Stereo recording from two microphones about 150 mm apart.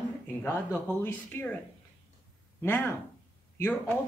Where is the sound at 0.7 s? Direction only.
15° left (ahead or behind).